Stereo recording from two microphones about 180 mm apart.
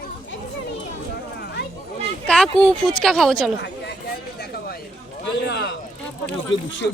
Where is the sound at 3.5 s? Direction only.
70° left (ahead or behind).